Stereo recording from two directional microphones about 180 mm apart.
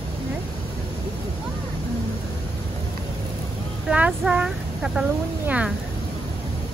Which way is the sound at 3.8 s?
5° right (ahead or behind).